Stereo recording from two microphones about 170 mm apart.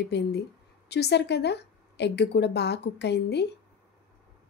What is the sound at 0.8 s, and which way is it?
A woman's voice, 75° left (ahead or behind).